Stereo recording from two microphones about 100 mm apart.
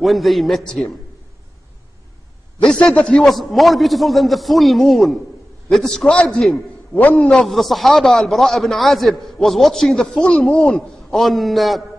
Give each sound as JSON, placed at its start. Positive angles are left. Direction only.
{"t": 0.0, "sound": "speech", "side_deg": 0}
{"t": 2.6, "sound": "speech", "side_deg": 10}
{"t": 6.9, "sound": "a man's voice", "side_deg": 15}
{"t": 7.2, "sound": "speech", "side_deg": 5}